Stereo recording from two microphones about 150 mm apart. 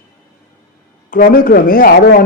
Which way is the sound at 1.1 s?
70° left (ahead or behind).